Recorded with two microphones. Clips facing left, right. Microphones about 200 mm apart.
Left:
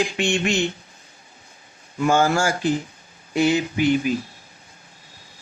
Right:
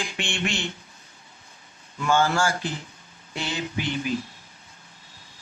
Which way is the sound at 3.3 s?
10° left (ahead or behind).